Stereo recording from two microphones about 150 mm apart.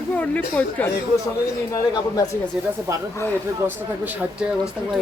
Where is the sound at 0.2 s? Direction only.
10° left (ahead or behind).